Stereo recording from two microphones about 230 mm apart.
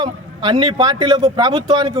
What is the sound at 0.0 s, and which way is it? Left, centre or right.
A man's voice, centre.